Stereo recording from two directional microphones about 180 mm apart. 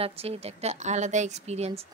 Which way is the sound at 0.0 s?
35° right (ahead or behind).